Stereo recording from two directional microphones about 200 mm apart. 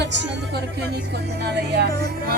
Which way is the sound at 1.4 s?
55° right (ahead or behind).